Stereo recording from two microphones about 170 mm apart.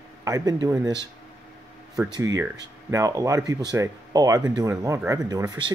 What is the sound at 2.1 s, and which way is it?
Speech, 20° right (ahead or behind).